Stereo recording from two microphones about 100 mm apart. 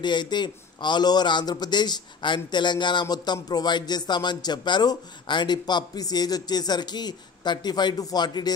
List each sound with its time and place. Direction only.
0.0 s speech: 50° left (ahead or behind)